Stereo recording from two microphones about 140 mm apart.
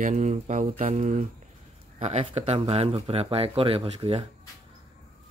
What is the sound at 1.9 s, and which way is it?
Speech, 50° right (ahead or behind).